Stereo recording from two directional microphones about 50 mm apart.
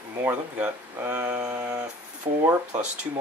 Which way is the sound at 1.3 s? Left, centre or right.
Right.